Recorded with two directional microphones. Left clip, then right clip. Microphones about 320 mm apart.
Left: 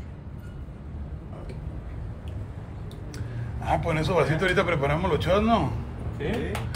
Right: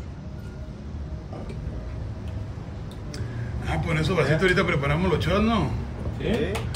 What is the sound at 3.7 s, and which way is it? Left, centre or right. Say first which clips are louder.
A man's voice: left 2 dB; centre.